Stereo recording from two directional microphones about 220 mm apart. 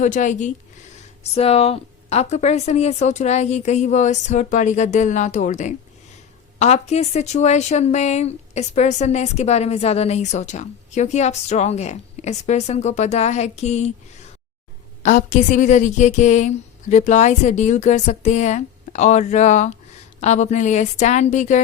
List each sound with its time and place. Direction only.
0.0 s a woman's voice: 35° left (ahead or behind)
15.0 s a woman's voice: 35° left (ahead or behind)